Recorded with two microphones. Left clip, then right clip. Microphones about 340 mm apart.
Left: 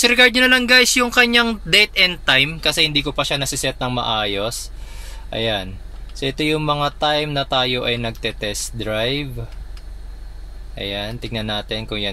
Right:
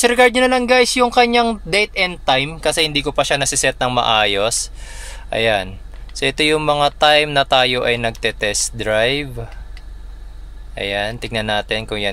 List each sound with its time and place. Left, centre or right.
0.0 s speech: centre
10.7 s speech: right